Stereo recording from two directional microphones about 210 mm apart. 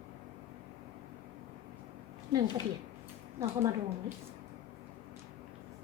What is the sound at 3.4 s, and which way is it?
Speech, 15° right (ahead or behind).